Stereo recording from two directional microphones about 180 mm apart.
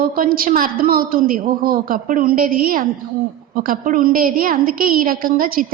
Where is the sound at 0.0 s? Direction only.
55° right (ahead or behind).